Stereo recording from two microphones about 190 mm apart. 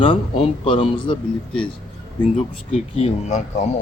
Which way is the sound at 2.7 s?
35° left (ahead or behind).